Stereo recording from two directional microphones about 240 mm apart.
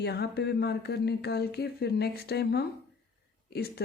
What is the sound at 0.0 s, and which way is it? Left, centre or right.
Speech, left.